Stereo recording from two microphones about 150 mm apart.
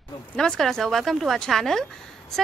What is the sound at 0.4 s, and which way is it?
Speech, 5° left (ahead or behind).